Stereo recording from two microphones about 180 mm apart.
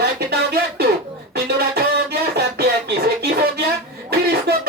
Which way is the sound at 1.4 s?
60° right (ahead or behind).